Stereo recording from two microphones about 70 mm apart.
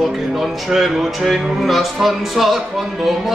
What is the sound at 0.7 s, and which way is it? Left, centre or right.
Music, centre.